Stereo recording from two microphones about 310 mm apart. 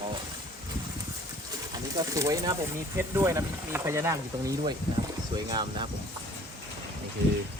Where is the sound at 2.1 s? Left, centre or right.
Centre.